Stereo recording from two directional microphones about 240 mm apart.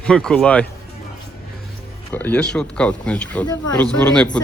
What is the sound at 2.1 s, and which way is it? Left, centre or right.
Speech, centre.